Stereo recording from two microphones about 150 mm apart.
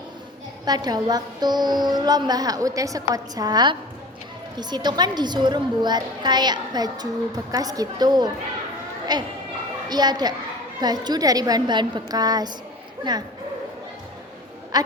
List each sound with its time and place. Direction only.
0.6 s a woman's voice: 25° right (ahead or behind)
14.7 s speech: 25° right (ahead or behind)